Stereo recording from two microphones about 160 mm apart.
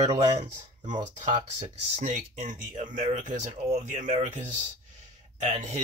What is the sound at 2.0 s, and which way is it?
Speech, 45° right (ahead or behind).